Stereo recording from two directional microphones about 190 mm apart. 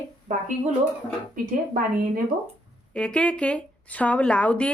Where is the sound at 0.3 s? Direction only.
40° right (ahead or behind).